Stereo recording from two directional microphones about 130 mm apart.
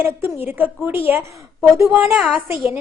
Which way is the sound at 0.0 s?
15° right (ahead or behind).